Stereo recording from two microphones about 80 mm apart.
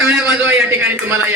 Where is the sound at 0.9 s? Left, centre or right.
Right.